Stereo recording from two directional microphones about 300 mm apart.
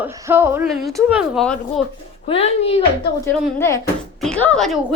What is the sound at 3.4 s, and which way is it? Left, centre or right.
A woman's voice, centre.